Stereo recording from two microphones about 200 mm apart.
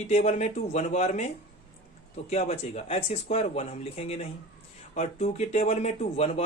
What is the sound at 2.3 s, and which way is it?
Speech, 35° left (ahead or behind).